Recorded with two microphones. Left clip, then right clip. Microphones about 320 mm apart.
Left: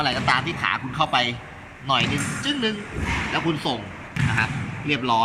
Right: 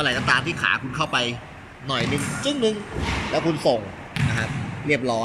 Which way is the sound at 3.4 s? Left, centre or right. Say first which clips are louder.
Right 8 dB; left.